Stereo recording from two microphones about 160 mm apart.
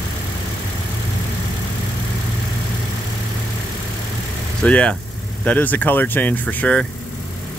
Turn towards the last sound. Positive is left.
turn(degrees=10)  # may be behind; listen again after turning